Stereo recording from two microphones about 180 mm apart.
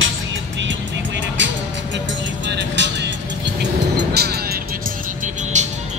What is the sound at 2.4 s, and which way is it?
Vehicle, 80° right.